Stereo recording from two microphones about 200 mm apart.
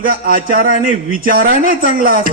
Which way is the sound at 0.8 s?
40° left (ahead or behind).